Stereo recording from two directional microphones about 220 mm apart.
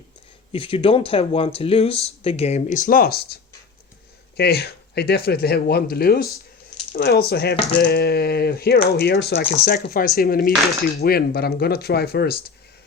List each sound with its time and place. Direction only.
0.5 s speech: 25° left (ahead or behind); by 3.2 s 45° left (ahead or behind)
4.4 s speech: 45° left (ahead or behind)